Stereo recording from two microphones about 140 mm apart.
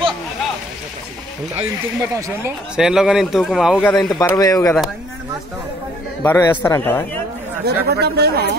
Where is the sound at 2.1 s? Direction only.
20° right (ahead or behind).